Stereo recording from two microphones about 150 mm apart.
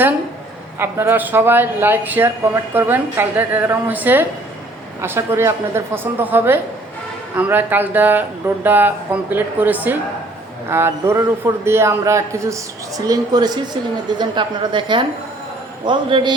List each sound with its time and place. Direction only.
0.8 s a woman's voice: 15° right (ahead or behind); by 16.3 s 35° right (ahead or behind)